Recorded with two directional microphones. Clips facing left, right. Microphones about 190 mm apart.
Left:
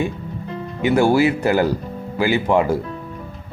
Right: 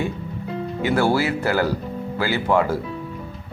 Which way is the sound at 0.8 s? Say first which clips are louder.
Left 5 dB; 15° left (ahead or behind).